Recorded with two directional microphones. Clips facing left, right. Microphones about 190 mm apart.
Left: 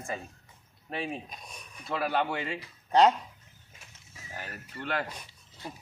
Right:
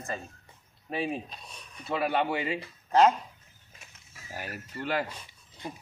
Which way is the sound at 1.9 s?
Centre (ahead or behind).